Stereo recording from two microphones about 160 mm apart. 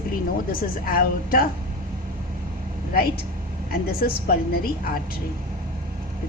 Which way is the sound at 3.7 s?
70° left (ahead or behind).